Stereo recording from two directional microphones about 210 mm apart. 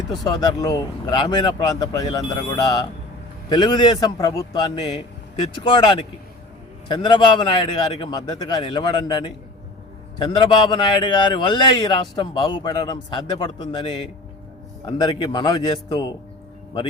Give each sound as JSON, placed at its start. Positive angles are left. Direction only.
{"t": 0.3, "sound": "a man's voice", "side_deg": 20}
{"t": 10.3, "sound": "a man's voice", "side_deg": 20}